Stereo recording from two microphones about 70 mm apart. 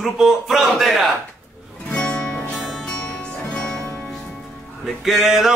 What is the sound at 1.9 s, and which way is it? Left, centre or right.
Music, centre.